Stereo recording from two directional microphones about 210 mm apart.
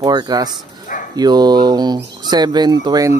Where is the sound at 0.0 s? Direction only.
20° right (ahead or behind).